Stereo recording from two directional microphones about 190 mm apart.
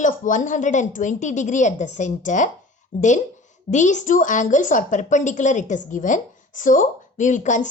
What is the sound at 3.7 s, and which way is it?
A woman's voice, 40° left (ahead or behind).